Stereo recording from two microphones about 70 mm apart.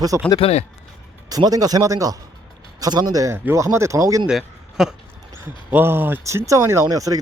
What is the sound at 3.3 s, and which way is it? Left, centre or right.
Speech, right.